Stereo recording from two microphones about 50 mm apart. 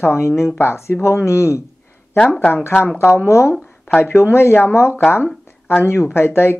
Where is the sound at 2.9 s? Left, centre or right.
Left.